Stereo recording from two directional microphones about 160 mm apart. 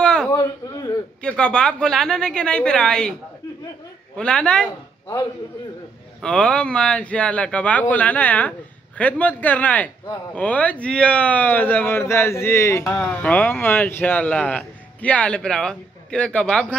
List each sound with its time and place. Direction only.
0.0 s a sound: 5° left (ahead or behind)
0.3 s a man's voice: 25° left (ahead or behind)
1.2 s a woman's voice: 5° left (ahead or behind)
4.2 s speech: 5° left (ahead or behind)
6.2 s speech: 5° left (ahead or behind)